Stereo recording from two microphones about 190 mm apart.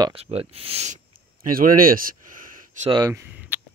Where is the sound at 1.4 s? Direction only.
45° right (ahead or behind).